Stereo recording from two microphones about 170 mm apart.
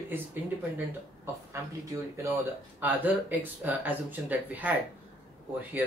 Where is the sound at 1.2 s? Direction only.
15° right (ahead or behind).